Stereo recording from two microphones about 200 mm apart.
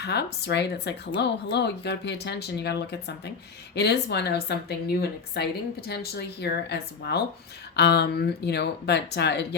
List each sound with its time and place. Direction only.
0.0 s speech: 55° left (ahead or behind)